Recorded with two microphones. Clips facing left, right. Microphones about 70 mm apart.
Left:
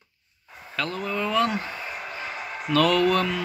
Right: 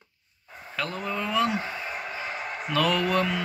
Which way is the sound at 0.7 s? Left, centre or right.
Centre.